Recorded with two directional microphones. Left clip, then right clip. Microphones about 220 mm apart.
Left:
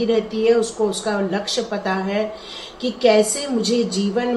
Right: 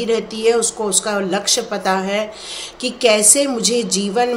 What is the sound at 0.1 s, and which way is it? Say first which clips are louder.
A woman's voice: right 2 dB; 50° right (ahead or behind).